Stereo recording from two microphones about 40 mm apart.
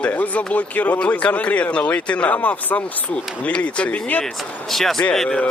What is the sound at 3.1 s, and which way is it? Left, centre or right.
Speech, left.